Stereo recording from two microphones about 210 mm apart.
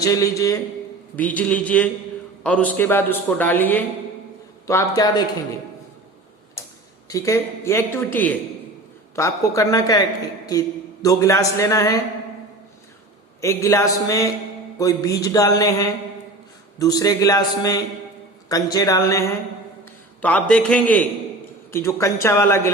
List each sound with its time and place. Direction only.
0.0 s a man's voice: 15° left (ahead or behind)
7.1 s a man's voice: 15° left (ahead or behind)
13.4 s a man's voice: 15° left (ahead or behind)